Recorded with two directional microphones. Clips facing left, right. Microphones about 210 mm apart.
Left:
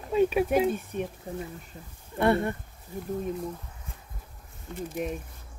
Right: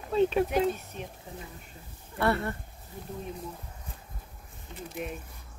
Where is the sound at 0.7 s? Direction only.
50° left (ahead or behind).